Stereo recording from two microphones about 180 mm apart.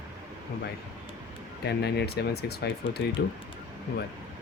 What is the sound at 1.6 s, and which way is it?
Speech, 65° left (ahead or behind).